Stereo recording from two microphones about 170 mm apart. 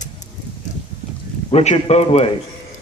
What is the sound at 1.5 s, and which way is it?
Speech, 40° left (ahead or behind).